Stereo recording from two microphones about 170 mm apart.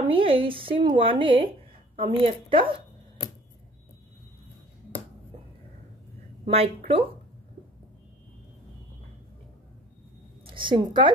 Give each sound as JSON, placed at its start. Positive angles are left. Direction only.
{"t": 0.1, "sound": "a woman's voice", "side_deg": -30}
{"t": 6.4, "sound": "a woman's voice", "side_deg": -35}
{"t": 10.4, "sound": "a woman's voice", "side_deg": -30}